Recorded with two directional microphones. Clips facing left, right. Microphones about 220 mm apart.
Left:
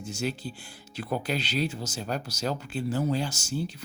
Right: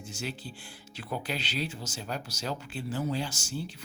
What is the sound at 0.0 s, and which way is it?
Speech, 40° left (ahead or behind).